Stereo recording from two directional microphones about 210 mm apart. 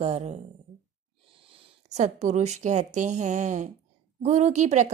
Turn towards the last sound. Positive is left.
turn(degrees=-35)  # may be behind; listen again after turning